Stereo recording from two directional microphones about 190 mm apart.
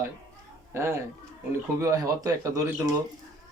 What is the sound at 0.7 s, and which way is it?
A man's voice, 15° right (ahead or behind).